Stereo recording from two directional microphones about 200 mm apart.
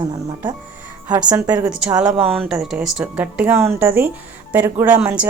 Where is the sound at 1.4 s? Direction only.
5° right (ahead or behind).